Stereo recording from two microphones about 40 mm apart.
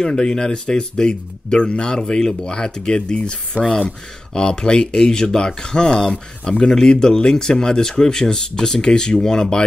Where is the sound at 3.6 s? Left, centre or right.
Right.